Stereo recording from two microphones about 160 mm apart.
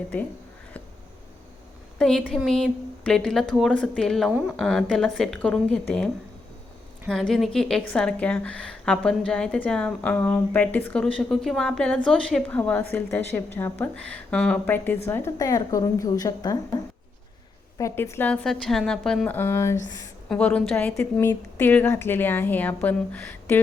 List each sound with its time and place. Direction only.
2.0 s a woman's voice: 5° left (ahead or behind)
4.3 s a woman's voice: 10° right (ahead or behind)
4.5 s a woman's voice: 5° left (ahead or behind)
7.1 s a woman's voice: centre (ahead or behind); by 16.6 s 25° left (ahead or behind)
17.7 s a woman's voice: 15° left (ahead or behind)